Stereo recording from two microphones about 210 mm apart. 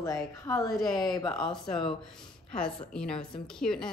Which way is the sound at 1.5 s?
Centre (ahead or behind).